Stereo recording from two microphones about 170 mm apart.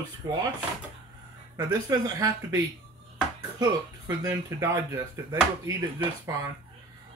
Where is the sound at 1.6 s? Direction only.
20° right (ahead or behind).